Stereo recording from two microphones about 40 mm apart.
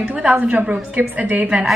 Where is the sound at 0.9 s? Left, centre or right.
Right.